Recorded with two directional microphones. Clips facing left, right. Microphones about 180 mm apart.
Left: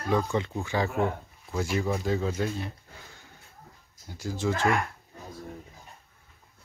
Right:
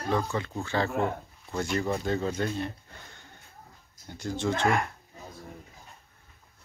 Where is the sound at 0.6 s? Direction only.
15° left (ahead or behind).